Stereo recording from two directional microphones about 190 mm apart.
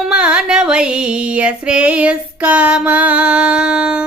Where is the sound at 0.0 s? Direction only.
5° right (ahead or behind).